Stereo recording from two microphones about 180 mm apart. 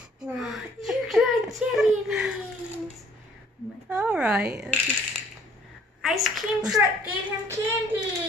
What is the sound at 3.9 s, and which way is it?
Speech, 5° right (ahead or behind).